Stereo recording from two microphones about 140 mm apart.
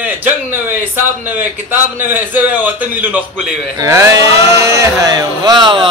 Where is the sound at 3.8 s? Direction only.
25° right (ahead or behind).